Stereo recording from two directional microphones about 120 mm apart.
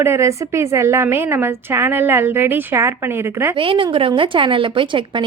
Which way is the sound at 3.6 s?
45° right (ahead or behind).